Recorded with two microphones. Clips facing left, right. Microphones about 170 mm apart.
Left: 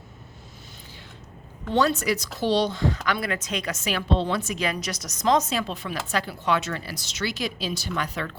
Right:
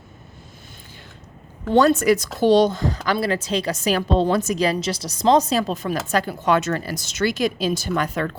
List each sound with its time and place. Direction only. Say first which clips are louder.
1.7 s a woman's voice: right 7 dB; 50° right (ahead or behind)